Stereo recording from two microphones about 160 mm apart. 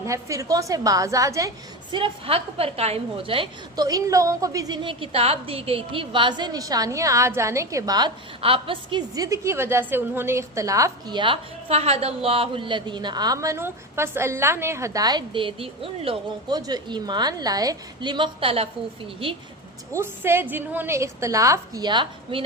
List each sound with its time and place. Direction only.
0.0 s a woman's voice: 20° right (ahead or behind)
2.0 s a woman's voice: 35° right (ahead or behind)
16.6 s a woman's voice: 25° right (ahead or behind)
19.9 s a woman's voice: 15° right (ahead or behind); by 22.4 s 30° right (ahead or behind)